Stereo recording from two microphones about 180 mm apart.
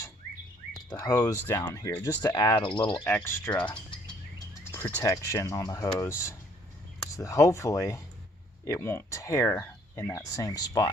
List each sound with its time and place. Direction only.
0.9 s speech: 20° left (ahead or behind)
1.1 s speech: 10° left (ahead or behind)
1.5 s cricket: 20° left (ahead or behind)
3.0 s speech: 10° left (ahead or behind)
4.9 s speech: 20° left (ahead or behind)